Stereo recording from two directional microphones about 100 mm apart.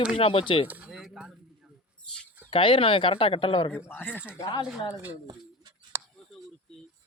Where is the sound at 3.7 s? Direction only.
20° left (ahead or behind).